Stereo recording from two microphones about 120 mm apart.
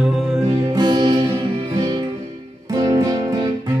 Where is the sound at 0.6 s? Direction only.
35° right (ahead or behind).